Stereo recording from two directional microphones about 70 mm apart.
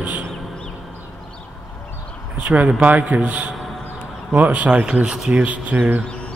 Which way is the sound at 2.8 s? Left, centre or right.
Right.